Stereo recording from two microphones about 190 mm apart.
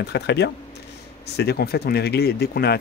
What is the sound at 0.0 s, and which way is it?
A man's voice, 60° left (ahead or behind).